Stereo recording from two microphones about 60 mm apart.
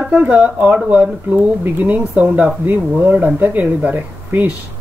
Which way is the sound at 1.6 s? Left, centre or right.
Right.